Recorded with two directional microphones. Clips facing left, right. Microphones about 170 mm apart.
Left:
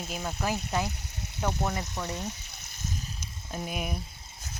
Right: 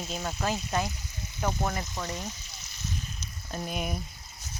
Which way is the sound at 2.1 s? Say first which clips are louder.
Left 1 dB; 60° left (ahead or behind).